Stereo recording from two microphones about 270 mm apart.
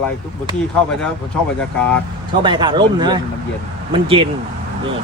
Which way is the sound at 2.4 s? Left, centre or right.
Centre.